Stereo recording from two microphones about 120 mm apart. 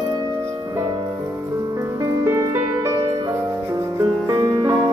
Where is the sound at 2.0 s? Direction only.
25° right (ahead or behind).